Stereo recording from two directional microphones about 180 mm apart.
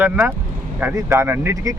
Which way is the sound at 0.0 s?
10° right (ahead or behind).